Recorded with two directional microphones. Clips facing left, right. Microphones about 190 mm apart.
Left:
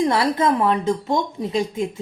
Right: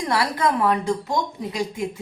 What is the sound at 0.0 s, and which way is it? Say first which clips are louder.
A woman's voice: left 4 dB; 25° left (ahead or behind).